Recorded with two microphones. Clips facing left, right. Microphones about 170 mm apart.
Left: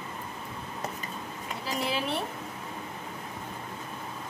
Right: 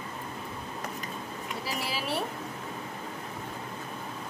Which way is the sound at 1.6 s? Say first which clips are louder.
Left 4 dB; 5° right (ahead or behind).